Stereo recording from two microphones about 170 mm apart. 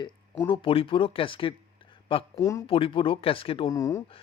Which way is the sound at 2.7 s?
35° left (ahead or behind).